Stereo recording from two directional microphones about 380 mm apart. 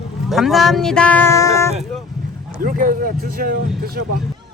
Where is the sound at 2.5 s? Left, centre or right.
Right.